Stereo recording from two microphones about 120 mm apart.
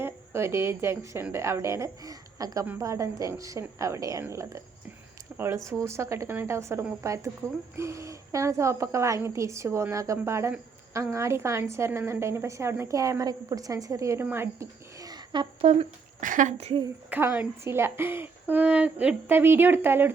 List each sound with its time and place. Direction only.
0.0 s a woman's voice: 20° right (ahead or behind)
14.3 s a sound: 20° right (ahead or behind); by 15.4 s 35° right (ahead or behind)
15.6 s speech: 75° right (ahead or behind)
17.1 s a woman's voice: 15° right (ahead or behind)